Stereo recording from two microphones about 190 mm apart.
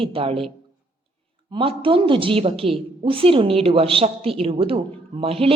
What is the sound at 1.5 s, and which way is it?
A woman's voice, 25° right (ahead or behind).